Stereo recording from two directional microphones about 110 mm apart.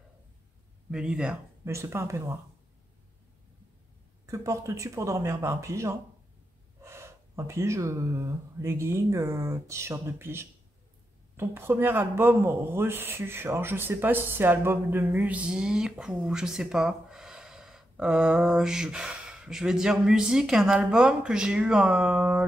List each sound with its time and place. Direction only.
0.9 s a man's voice: 10° right (ahead or behind)
1.6 s speech: 25° right (ahead or behind)
4.3 s a man's voice: 30° right (ahead or behind); by 22.4 s 10° right (ahead or behind)